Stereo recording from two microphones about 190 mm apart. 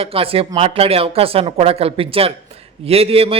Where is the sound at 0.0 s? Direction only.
30° right (ahead or behind).